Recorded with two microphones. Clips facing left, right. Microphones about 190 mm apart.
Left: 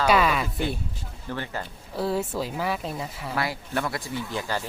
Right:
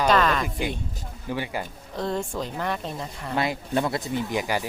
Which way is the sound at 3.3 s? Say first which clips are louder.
Right 4 dB; 20° right (ahead or behind).